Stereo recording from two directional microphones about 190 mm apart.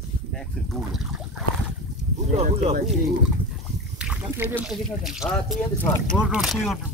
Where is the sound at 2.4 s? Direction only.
35° right (ahead or behind).